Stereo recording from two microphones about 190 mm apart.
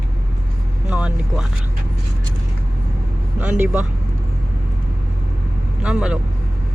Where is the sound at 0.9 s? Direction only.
5° right (ahead or behind).